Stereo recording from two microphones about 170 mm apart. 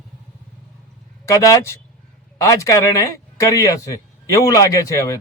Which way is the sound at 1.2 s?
20° left (ahead or behind).